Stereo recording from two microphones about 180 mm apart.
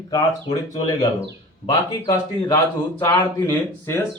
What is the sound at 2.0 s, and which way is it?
Speech, 30° left (ahead or behind).